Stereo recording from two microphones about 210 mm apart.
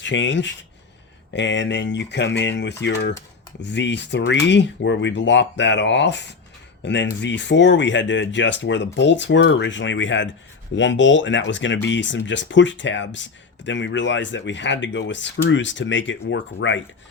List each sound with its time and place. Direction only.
0.0 s speech: 60° left (ahead or behind)